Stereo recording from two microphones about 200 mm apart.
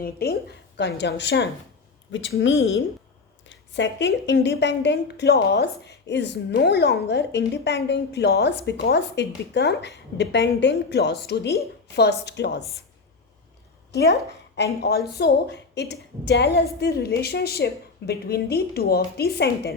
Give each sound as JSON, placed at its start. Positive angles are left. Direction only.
{"t": 0.0, "sound": "a woman's voice", "side_deg": 50}
{"t": 3.4, "sound": "a woman's voice", "side_deg": 65}
{"t": 14.5, "sound": "a woman's voice", "side_deg": 55}